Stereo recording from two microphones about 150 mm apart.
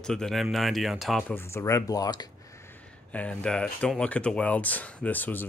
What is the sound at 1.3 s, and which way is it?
Speech, 15° left (ahead or behind).